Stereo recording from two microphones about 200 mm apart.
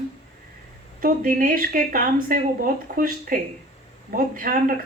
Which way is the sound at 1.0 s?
45° right (ahead or behind).